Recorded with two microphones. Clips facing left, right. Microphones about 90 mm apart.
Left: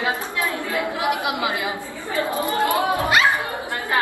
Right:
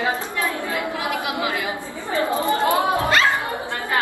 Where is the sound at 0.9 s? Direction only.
20° left (ahead or behind).